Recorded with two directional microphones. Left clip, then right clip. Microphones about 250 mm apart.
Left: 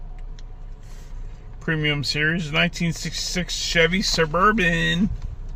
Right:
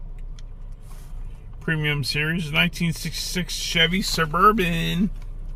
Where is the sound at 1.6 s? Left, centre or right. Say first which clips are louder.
Left 2 dB; centre.